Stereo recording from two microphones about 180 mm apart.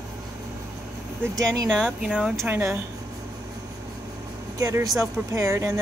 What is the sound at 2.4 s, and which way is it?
Speech, 15° right (ahead or behind).